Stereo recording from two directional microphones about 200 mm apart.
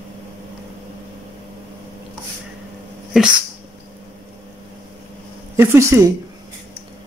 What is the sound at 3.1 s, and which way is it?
Dog, centre (ahead or behind).